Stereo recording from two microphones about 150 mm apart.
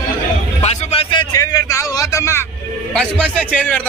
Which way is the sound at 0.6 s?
45° left (ahead or behind).